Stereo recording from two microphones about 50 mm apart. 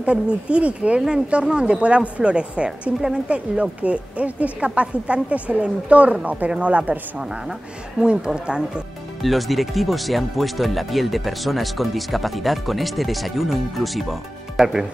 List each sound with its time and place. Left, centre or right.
0.0 s a woman's voice: right
9.2 s speech: centre